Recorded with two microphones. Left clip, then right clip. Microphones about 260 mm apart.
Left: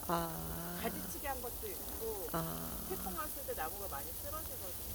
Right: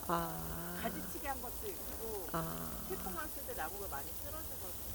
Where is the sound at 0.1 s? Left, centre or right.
Centre.